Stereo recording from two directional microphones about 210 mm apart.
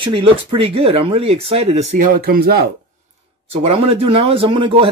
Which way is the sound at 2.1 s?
45° right (ahead or behind).